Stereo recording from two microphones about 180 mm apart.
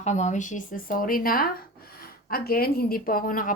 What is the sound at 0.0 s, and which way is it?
A woman's voice, 40° left (ahead or behind).